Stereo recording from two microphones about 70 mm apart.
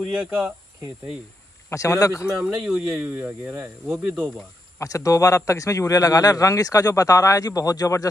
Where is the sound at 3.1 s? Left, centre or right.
Right.